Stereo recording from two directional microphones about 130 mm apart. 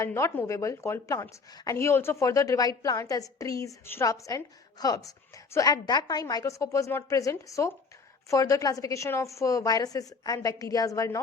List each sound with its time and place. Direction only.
0.0 s a woman's voice: 20° left (ahead or behind)